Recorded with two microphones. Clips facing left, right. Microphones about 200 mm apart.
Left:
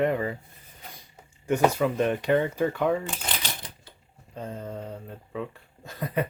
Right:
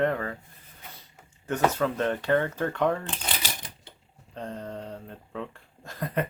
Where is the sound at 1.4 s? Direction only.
10° left (ahead or behind).